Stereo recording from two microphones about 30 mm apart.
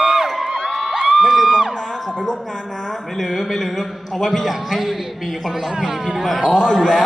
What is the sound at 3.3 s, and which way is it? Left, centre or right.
Speech, centre.